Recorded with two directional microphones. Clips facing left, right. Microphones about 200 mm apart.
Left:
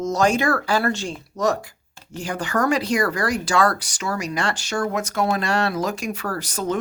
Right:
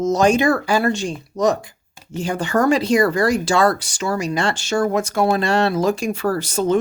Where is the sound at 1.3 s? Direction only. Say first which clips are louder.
Right 3 dB; 20° right (ahead or behind).